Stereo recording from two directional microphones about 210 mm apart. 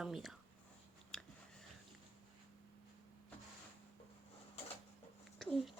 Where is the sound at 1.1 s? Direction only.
5° left (ahead or behind).